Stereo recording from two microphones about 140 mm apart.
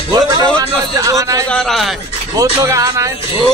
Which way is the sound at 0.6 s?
25° right (ahead or behind).